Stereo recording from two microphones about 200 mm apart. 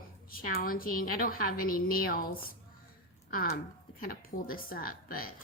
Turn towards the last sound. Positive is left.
turn(degrees=45)  # may be behind; listen again after turning